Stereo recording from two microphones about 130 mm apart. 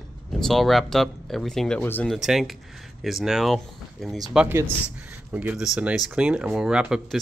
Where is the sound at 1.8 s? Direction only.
15° left (ahead or behind).